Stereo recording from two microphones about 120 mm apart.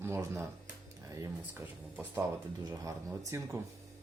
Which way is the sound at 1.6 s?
15° right (ahead or behind).